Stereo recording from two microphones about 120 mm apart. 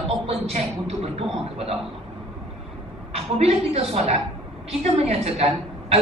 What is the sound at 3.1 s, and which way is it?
A woman's voice, 60° right (ahead or behind).